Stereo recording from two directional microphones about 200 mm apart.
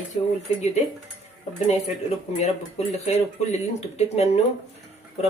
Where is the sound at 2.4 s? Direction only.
35° left (ahead or behind).